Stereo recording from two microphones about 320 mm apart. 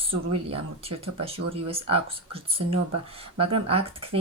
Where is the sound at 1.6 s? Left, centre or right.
Centre.